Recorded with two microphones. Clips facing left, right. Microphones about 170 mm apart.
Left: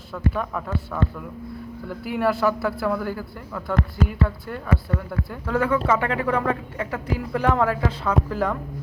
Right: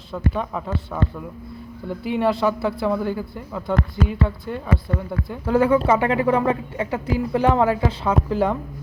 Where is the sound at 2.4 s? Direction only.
20° right (ahead or behind).